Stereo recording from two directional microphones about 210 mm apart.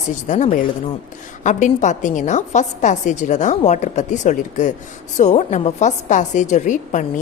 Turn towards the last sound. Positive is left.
turn(degrees=35)  # may be behind; listen again after turning